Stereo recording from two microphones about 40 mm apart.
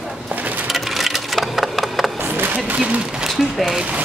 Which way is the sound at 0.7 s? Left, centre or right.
Centre.